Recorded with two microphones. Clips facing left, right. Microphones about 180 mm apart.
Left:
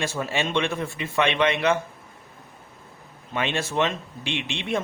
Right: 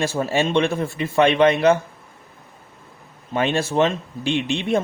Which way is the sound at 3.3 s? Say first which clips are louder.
Right 6 dB; 40° right (ahead or behind).